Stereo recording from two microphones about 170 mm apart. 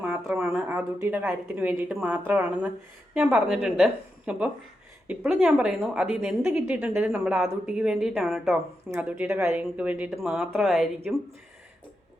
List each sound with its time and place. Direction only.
0.0 s a woman's voice: 10° right (ahead or behind)